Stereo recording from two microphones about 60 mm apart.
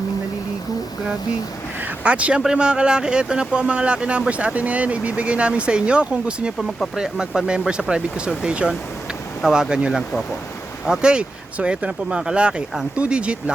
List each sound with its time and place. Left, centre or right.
2.0 s speech: right
6.6 s speech: centre